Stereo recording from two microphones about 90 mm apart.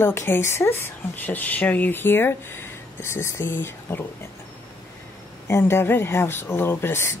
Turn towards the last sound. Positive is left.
turn(degrees=25)  # may be behind; listen again after turning